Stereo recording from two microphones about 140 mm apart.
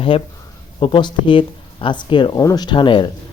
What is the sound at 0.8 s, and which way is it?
Speech, 35° left (ahead or behind).